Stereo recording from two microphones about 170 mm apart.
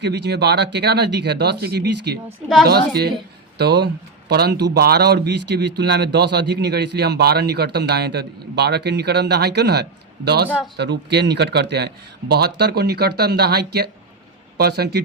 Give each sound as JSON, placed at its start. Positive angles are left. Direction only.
{"t": 0.0, "sound": "speech", "side_deg": -85}
{"t": 2.6, "sound": "speech", "side_deg": -70}